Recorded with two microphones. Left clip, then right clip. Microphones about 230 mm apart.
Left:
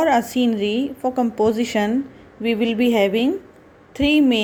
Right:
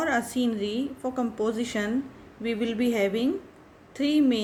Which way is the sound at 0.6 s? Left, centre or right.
Centre.